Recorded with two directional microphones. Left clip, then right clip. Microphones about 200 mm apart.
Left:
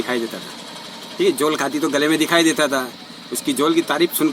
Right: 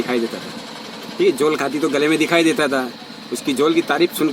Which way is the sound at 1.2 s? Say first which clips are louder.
Right 1 dB; 15° left (ahead or behind).